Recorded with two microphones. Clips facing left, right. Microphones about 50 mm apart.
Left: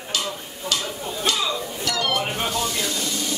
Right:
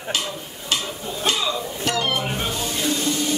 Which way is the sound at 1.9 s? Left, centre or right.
Right.